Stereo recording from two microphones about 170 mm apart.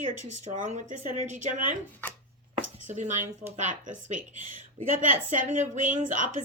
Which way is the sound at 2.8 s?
45° right (ahead or behind).